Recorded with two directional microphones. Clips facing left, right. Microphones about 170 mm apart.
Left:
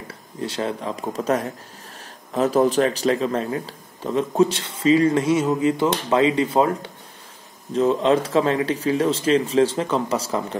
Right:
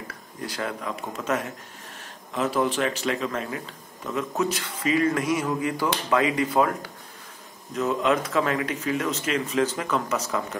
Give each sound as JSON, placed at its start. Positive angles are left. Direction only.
{"t": 0.1, "sound": "speech", "side_deg": 25}